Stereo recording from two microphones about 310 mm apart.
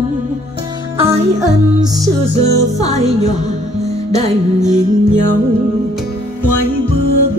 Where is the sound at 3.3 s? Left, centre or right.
Right.